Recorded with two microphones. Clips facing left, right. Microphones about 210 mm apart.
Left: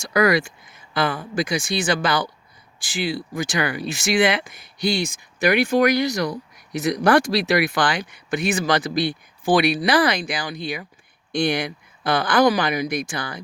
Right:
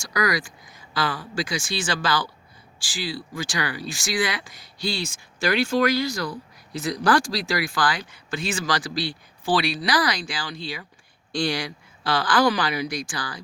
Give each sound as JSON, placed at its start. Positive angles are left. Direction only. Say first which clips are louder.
{"t": 0.0, "sound": "speech", "louder": "left 7 dB", "side_deg": 25}